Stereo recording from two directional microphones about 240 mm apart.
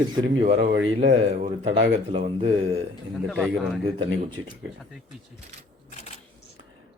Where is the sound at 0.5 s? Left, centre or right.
Right.